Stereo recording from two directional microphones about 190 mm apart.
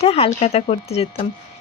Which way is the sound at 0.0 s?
30° left (ahead or behind).